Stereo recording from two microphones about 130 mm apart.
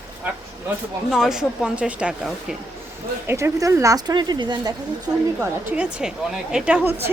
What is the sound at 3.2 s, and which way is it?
Speech, 20° right (ahead or behind).